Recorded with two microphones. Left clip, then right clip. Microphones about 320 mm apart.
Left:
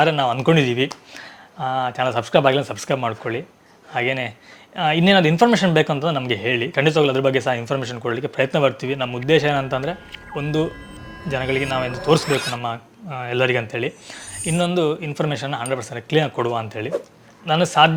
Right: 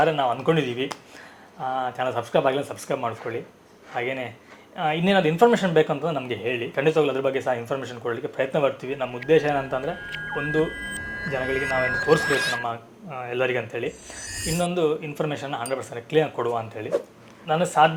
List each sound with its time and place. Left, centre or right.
0.0 s speech: left